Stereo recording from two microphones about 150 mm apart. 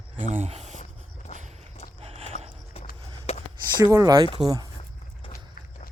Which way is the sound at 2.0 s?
40° right (ahead or behind).